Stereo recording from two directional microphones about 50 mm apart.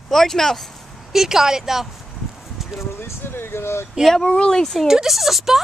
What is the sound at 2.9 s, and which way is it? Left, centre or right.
Speech, left.